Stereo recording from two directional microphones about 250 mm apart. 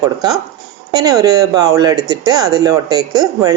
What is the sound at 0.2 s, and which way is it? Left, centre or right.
Speech, centre.